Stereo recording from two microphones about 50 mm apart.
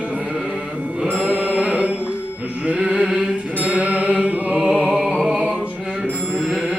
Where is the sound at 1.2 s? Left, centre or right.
Right.